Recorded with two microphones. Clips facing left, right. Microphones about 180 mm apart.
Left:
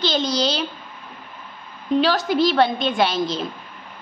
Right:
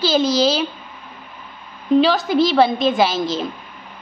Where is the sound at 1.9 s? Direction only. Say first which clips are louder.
Right 4 dB; centre (ahead or behind).